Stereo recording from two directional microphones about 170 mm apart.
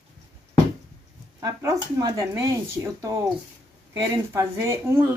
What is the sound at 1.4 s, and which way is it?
A woman's voice, 20° right (ahead or behind).